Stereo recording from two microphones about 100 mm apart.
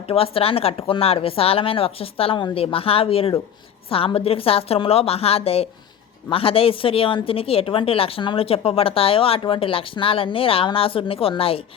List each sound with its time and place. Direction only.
0.1 s a woman's voice: 70° left (ahead or behind)
6.3 s a woman's voice: 70° left (ahead or behind)